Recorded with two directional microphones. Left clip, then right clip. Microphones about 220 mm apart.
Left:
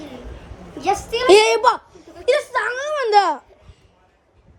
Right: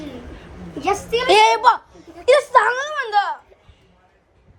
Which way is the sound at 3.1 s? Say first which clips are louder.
Left 5 dB; 25° left (ahead or behind).